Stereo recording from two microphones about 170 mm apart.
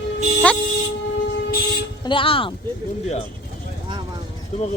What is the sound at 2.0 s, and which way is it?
Speech, 30° left (ahead or behind).